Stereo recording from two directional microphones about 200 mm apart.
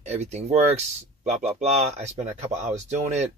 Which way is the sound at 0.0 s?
35° right (ahead or behind).